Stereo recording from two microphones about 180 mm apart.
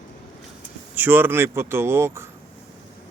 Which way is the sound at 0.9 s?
10° right (ahead or behind).